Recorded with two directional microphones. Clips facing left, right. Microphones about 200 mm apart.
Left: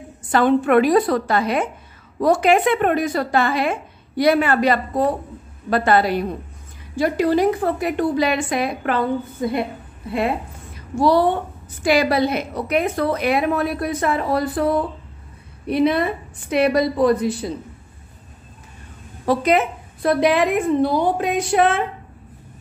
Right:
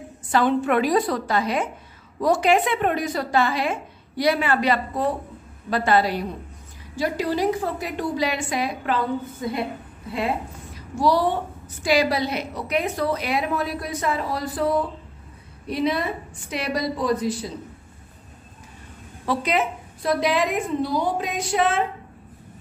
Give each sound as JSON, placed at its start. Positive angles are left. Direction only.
{"t": 0.3, "sound": "a woman's voice", "side_deg": 55}
{"t": 11.0, "sound": "a woman's voice", "side_deg": 55}
{"t": 15.6, "sound": "a woman's voice", "side_deg": 60}
{"t": 19.2, "sound": "a woman's voice", "side_deg": 50}